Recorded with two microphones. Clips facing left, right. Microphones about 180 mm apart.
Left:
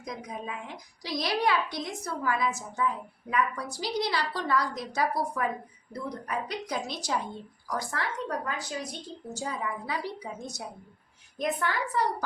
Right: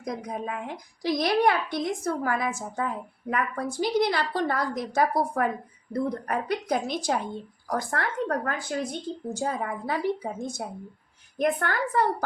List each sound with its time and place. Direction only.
0.3 s a woman's voice: 55° right (ahead or behind)